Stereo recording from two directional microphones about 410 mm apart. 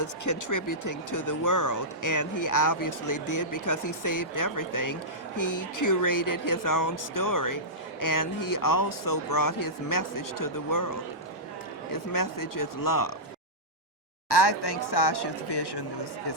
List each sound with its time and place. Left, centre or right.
0.0 s speech: left
11.9 s speech: left
14.3 s speech: left